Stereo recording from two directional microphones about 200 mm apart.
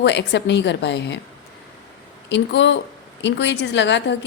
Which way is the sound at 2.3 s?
65° left (ahead or behind).